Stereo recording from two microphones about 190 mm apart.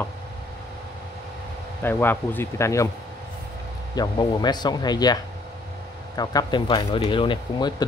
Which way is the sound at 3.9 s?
20° left (ahead or behind).